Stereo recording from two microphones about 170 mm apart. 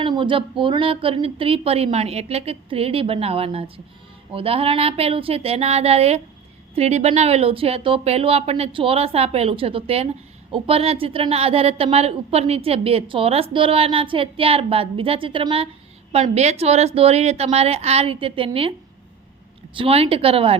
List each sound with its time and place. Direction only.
0.0 s a woman's voice: 30° right (ahead or behind)
19.7 s a woman's voice: 35° right (ahead or behind)